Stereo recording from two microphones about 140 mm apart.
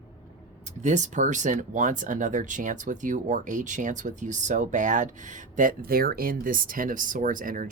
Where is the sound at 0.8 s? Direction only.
60° right (ahead or behind).